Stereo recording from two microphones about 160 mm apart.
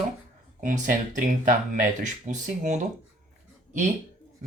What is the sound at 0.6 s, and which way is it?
Speech, 55° right (ahead or behind).